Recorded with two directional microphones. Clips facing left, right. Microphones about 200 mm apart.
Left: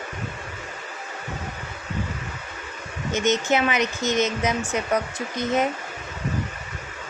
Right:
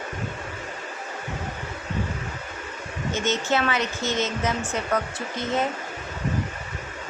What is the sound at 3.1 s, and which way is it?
Speech, 20° left (ahead or behind).